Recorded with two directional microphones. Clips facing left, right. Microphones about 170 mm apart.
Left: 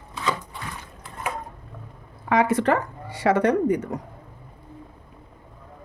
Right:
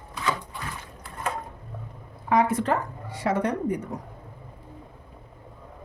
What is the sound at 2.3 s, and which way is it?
Speech, 80° left.